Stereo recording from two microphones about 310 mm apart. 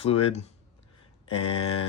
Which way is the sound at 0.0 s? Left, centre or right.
Centre.